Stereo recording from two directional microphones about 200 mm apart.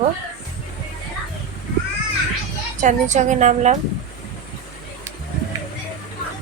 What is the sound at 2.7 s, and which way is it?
Speech, 35° right (ahead or behind).